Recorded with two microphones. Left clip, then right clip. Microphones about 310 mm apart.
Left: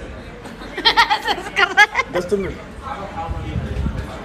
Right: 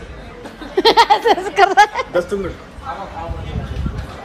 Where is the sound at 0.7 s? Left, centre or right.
Centre.